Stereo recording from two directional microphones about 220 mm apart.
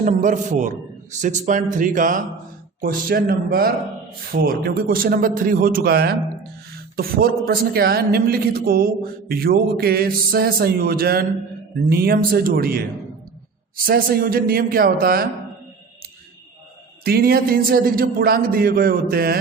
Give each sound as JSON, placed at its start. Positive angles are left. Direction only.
{"t": 0.0, "sound": "a man's voice", "side_deg": -35}
{"t": 13.8, "sound": "a man's voice", "side_deg": -40}
{"t": 17.0, "sound": "a man's voice", "side_deg": -45}